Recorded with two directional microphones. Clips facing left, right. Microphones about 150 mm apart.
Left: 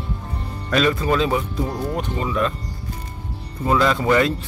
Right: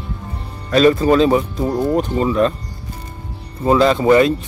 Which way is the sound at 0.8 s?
35° right (ahead or behind).